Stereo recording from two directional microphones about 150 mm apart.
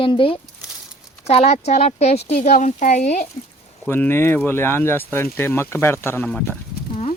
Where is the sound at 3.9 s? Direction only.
15° left (ahead or behind).